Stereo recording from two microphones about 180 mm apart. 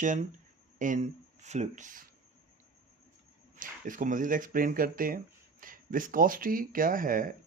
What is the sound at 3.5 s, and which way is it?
Speech, 50° right (ahead or behind).